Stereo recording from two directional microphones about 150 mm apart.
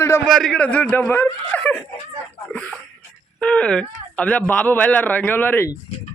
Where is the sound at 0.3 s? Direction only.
Centre (ahead or behind).